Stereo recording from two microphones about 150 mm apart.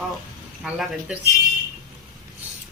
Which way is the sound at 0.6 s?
5° right (ahead or behind).